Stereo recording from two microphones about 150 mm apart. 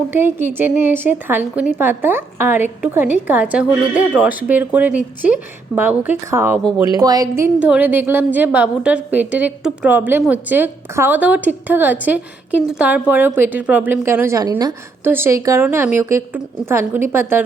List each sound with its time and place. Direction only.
0.1 s a woman's voice: 15° right (ahead or behind)
6.7 s a woman's voice: 25° right (ahead or behind)